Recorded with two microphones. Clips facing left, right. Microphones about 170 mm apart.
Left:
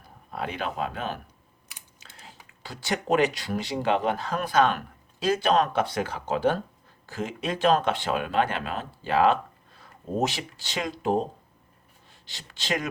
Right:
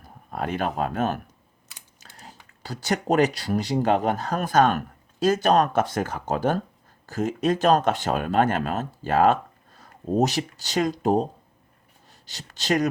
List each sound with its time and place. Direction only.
0.3 s speech: 45° right (ahead or behind)